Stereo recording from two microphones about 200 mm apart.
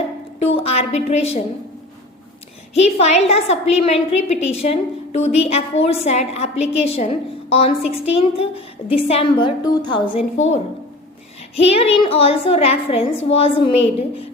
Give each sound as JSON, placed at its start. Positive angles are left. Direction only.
{"t": 0.3, "sound": "a woman's voice", "side_deg": 30}
{"t": 2.7, "sound": "a woman's voice", "side_deg": 35}
{"t": 10.3, "sound": "a woman's voice", "side_deg": 35}